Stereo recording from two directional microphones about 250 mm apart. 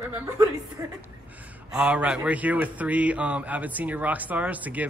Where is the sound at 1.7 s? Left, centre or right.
Centre.